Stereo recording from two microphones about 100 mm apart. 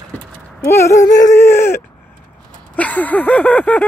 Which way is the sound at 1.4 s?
25° left (ahead or behind).